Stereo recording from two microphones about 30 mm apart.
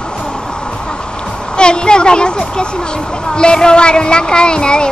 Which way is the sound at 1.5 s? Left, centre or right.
Left.